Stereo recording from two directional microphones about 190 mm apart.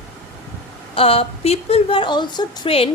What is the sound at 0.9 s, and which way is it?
A woman's voice, 30° left (ahead or behind).